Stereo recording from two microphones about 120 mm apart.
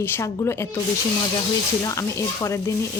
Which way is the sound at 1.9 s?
25° left (ahead or behind).